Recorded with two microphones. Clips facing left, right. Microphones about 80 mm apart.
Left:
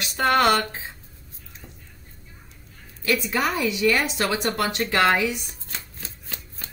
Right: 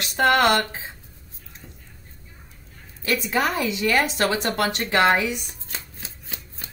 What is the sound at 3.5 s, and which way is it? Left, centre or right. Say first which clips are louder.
Speech: even; right.